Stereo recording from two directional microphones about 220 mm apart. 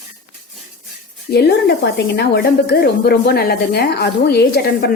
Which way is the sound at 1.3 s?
45° left (ahead or behind).